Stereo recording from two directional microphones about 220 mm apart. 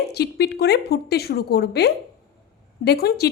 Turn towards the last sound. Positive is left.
turn(degrees=45)  # may be behind; listen again after turning